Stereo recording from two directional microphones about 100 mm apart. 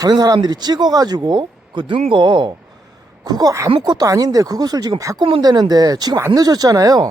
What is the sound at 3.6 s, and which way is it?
Speech, 50° right (ahead or behind).